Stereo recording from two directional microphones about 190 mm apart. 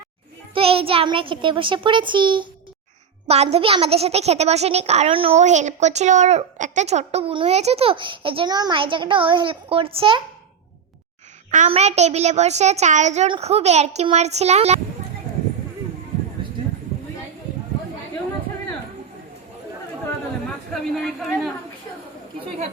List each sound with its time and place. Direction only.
0.5 s a child's voice: 30° right (ahead or behind)
11.5 s a woman's voice: 35° right (ahead or behind)
20.9 s speech: centre (ahead or behind)